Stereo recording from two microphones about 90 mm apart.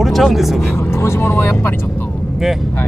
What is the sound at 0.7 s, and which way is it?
Speech, 30° left (ahead or behind).